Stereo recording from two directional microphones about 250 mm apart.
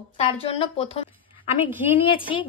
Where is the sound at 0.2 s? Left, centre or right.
Left.